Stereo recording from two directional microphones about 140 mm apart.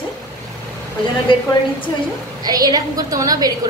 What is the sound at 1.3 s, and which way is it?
Speech, 35° left (ahead or behind).